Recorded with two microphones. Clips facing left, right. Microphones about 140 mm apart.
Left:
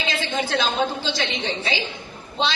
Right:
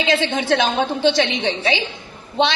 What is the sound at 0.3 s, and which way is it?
Speech, 70° right (ahead or behind).